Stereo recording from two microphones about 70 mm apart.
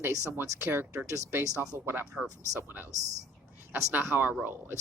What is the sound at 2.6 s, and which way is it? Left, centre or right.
Speech, right.